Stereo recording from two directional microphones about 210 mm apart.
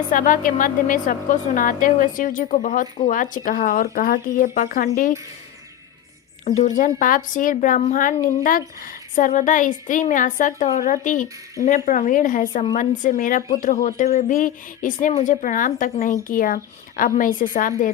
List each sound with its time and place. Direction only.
0.1 s speech: 40° left (ahead or behind)
6.4 s speech: 35° left (ahead or behind)